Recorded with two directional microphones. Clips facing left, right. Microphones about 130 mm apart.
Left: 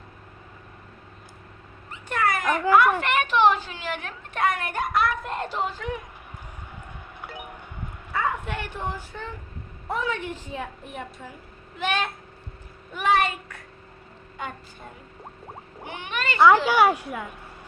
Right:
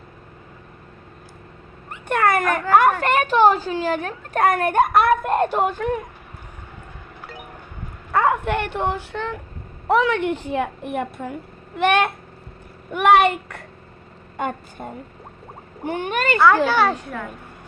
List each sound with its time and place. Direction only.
1.9 s cat: 60° right (ahead or behind)
3.0 s a woman's voice: 40° right (ahead or behind)
7.2 s wind chime: 20° left (ahead or behind)
8.1 s a woman's voice: 65° right (ahead or behind)
14.3 s a woman's voice: 50° right (ahead or behind)
16.6 s speech: 10° left (ahead or behind)